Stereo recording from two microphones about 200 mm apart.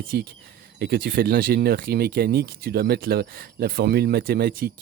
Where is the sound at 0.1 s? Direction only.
45° right (ahead or behind).